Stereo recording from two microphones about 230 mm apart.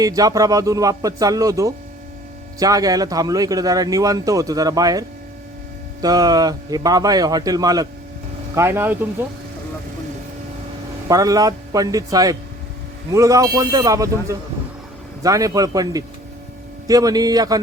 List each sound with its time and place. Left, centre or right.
0.0 s speech: centre
11.1 s speech: centre